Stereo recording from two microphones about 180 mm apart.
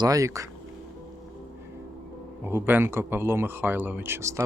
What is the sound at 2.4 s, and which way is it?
Speech, 10° right (ahead or behind).